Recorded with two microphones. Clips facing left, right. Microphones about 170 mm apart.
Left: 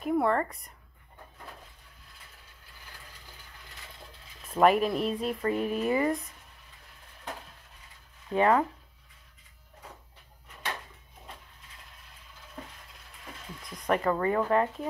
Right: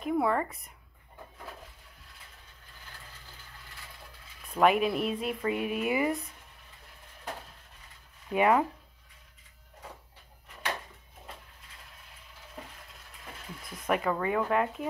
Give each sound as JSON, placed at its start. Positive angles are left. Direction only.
{"t": 0.0, "sound": "speech", "side_deg": -5}
{"t": 4.5, "sound": "speech", "side_deg": 0}
{"t": 8.3, "sound": "speech", "side_deg": -10}
{"t": 13.6, "sound": "speech", "side_deg": -5}